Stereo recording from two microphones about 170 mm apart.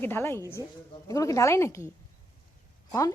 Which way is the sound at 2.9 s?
20° left (ahead or behind).